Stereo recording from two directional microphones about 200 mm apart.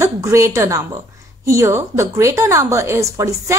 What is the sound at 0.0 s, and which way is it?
A woman's voice, 15° right (ahead or behind).